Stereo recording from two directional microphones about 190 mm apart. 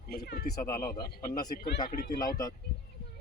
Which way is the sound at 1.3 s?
20° left (ahead or behind).